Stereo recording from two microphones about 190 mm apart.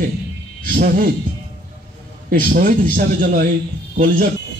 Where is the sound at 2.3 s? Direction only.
50° right (ahead or behind).